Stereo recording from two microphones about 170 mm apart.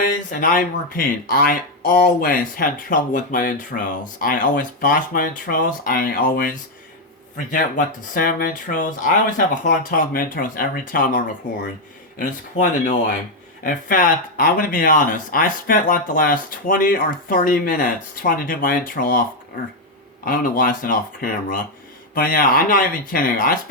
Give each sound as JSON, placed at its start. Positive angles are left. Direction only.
{"t": 0.3, "sound": "speech", "side_deg": 50}
{"t": 12.2, "sound": "speech", "side_deg": 50}
{"t": 20.2, "sound": "speech", "side_deg": 55}